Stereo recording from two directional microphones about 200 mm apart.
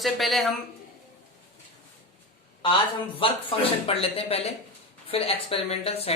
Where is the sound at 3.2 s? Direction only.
25° left (ahead or behind).